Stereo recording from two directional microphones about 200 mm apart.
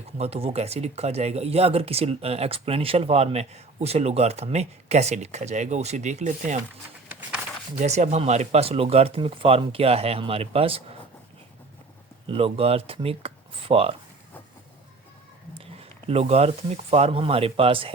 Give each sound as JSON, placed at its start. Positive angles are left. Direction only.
{"t": 0.2, "sound": "speech", "side_deg": -30}
{"t": 7.8, "sound": "speech", "side_deg": -35}
{"t": 12.3, "sound": "speech", "side_deg": -30}
{"t": 15.5, "sound": "speech", "side_deg": -30}